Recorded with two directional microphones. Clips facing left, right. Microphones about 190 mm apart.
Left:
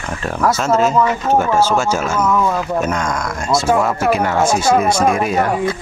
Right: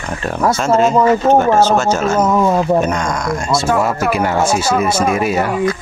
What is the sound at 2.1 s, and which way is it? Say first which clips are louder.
Speech: right 4 dB; 30° right (ahead or behind).